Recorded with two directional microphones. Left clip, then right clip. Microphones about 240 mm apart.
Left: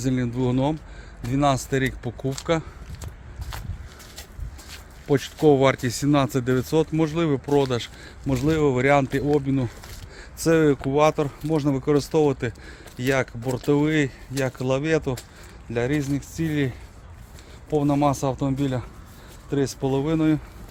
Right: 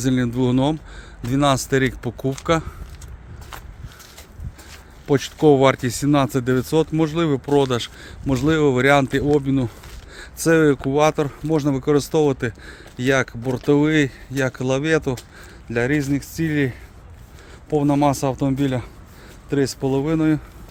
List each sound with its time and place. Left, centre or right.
0.0 s speech: right
5.0 s speech: right
10.2 s a sound: centre
10.8 s speech: centre